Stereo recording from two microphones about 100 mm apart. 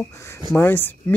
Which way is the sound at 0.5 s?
20° left (ahead or behind).